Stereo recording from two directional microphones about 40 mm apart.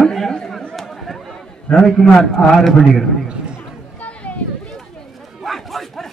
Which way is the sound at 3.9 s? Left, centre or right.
Left.